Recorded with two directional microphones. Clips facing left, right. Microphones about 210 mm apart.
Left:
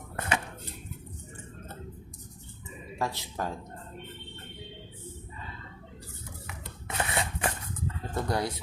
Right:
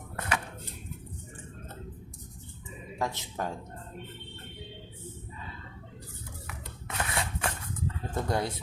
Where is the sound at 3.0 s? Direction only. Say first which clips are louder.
Even; 20° right (ahead or behind).